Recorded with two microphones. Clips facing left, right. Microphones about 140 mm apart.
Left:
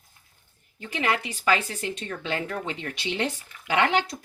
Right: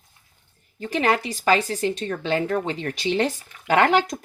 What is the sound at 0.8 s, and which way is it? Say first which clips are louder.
Speech: right 5 dB; 40° right (ahead or behind).